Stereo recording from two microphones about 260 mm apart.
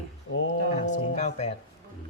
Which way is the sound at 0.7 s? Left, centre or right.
Left.